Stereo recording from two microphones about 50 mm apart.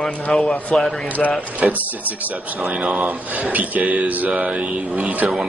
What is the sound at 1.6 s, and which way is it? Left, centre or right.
Speech, right.